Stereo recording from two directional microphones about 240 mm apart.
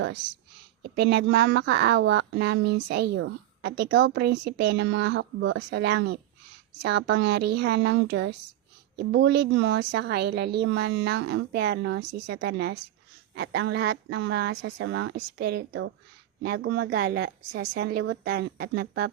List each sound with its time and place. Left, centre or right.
0.8 s a woman's voice: right